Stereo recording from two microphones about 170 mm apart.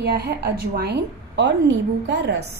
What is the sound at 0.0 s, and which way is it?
A woman's voice, 70° right (ahead or behind).